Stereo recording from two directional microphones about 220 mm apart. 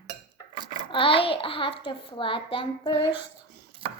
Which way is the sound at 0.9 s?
25° left (ahead or behind).